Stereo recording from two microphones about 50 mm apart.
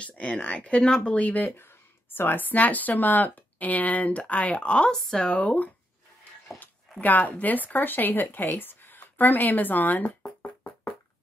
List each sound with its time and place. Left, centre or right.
0.0 s speech: left
1.1 s speech: left
2.0 s speech: left
4.9 s speech: centre
5.4 s speech: left
7.0 s speech: left